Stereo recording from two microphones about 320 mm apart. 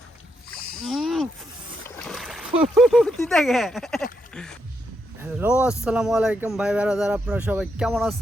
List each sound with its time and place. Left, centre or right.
0.8 s a sound: centre
2.0 s splash: centre
2.7 s speech: centre